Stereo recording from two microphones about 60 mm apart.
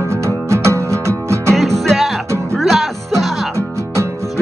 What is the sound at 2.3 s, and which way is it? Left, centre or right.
Music, right.